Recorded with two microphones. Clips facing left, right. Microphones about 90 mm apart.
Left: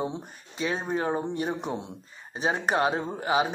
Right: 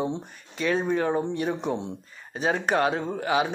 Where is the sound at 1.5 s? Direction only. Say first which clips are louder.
Right 3 dB; 5° left (ahead or behind).